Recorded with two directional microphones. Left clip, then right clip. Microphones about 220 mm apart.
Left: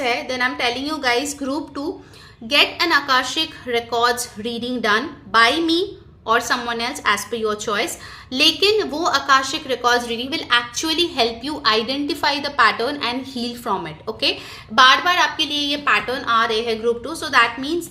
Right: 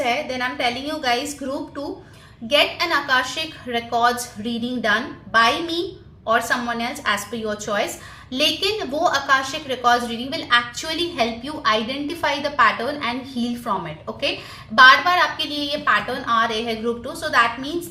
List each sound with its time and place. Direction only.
0.0 s a woman's voice: 45° left (ahead or behind)